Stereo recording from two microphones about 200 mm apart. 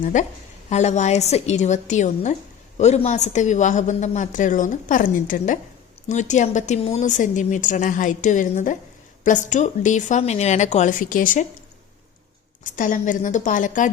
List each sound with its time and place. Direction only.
0.0 s speech: 40° left (ahead or behind)
12.6 s speech: 40° left (ahead or behind)